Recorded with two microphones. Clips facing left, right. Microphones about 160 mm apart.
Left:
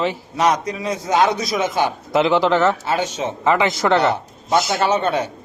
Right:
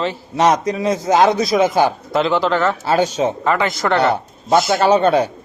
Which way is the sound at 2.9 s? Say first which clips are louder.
Right 5 dB; 35° right (ahead or behind).